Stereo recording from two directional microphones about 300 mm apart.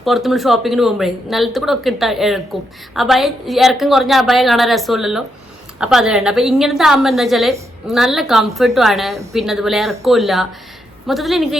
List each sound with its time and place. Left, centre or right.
0.0 s a woman's voice: centre